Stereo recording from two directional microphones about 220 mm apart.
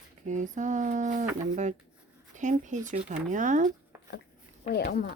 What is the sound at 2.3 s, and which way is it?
Speech, 35° right (ahead or behind).